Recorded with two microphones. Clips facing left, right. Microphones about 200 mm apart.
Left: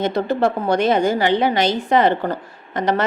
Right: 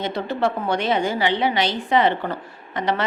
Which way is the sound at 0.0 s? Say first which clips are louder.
Left 5 dB; 40° left (ahead or behind).